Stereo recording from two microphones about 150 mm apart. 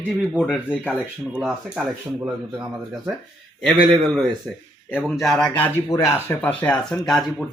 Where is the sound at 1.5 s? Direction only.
10° right (ahead or behind).